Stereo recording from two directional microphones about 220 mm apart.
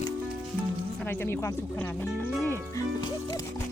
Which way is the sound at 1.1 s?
10° left (ahead or behind).